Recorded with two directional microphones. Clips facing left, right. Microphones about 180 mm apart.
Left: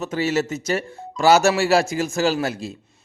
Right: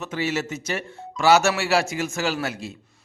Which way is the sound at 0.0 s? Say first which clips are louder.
Left 4 dB; 40° left (ahead or behind).